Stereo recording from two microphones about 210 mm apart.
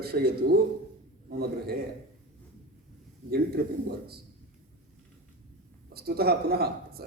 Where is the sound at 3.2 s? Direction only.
45° right (ahead or behind).